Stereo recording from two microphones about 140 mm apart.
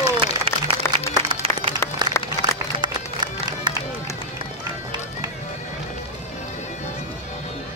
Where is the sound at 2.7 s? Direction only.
30° right (ahead or behind).